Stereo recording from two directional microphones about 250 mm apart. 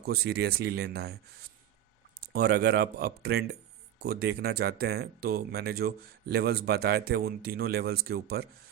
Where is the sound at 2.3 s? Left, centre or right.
Right.